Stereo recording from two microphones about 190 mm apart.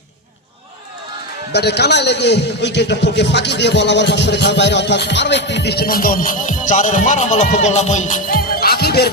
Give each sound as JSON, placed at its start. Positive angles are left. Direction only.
{"t": 1.5, "sound": "a man's voice", "side_deg": 60}